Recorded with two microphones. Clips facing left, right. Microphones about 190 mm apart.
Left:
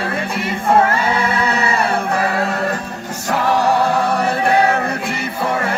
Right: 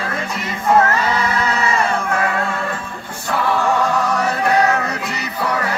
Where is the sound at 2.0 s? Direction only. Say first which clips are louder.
Left 2 dB; 35° left (ahead or behind).